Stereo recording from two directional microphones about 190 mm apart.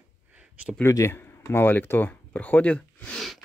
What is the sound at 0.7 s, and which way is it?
Speech, 15° left (ahead or behind).